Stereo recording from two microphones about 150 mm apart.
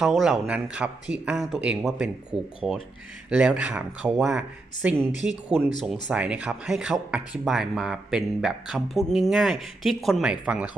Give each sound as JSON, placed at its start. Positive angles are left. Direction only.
{"t": 0.0, "sound": "speech", "side_deg": 0}
{"t": 2.3, "sound": "speech", "side_deg": -40}
{"t": 3.2, "sound": "speech", "side_deg": -5}